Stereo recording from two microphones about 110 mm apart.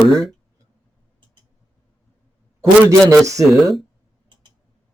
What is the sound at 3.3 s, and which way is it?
Speech, 30° right (ahead or behind).